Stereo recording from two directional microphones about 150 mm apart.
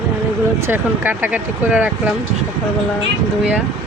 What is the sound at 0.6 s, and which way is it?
Speech, 15° right (ahead or behind).